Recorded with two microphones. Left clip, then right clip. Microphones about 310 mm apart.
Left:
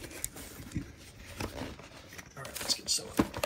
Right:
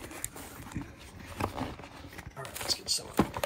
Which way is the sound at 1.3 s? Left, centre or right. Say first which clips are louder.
Right 5 dB; right.